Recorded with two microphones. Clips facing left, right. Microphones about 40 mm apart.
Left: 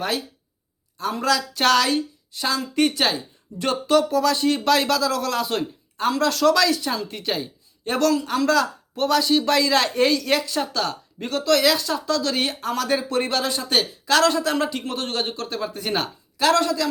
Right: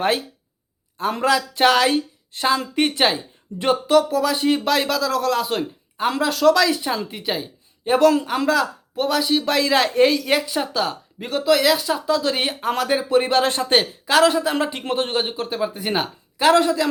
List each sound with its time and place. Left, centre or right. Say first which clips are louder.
0.0 s speech: right 5 dB; right
3.8 s a man's voice: left 1 dB; centre
4.6 s a man's voice: left 1 dB; centre
6.7 s speech: right 1 dB; centre
8.1 s speech: right 1 dB; right
8.4 s a man's voice: even; centre
13.3 s speech: right 5 dB; right
14.1 s a man's voice: right 2 dB; centre
14.7 s a man's voice: right 5 dB; right